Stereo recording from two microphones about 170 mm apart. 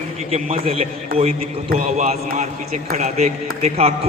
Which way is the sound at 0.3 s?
40° right (ahead or behind).